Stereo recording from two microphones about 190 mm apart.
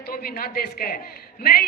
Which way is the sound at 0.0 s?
50° left (ahead or behind).